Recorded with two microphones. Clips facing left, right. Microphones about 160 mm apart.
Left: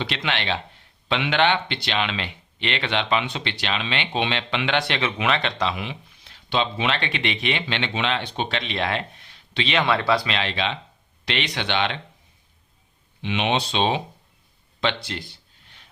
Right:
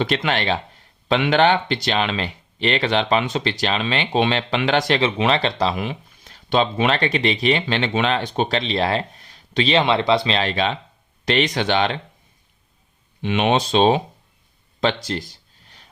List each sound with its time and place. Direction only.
0.0 s speech: 45° right (ahead or behind)
9.8 s speech: 20° right (ahead or behind)
10.3 s speech: 40° right (ahead or behind)
13.2 s speech: 45° right (ahead or behind)
14.8 s a sound: 40° right (ahead or behind)